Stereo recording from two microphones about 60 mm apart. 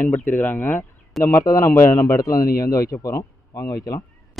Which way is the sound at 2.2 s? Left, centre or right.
Left.